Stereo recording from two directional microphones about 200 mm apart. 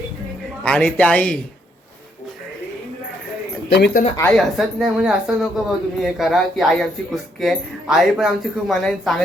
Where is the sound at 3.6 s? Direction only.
55° left (ahead or behind).